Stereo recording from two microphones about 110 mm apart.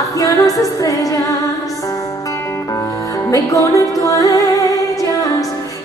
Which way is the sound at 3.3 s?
30° left (ahead or behind).